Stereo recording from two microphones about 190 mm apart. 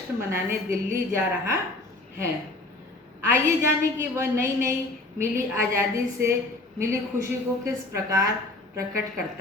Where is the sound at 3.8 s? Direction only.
15° right (ahead or behind).